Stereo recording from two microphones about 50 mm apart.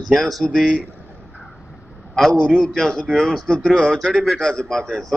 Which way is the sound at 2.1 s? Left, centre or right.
Centre.